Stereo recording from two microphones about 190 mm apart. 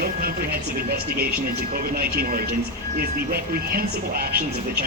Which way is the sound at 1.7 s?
55° right (ahead or behind).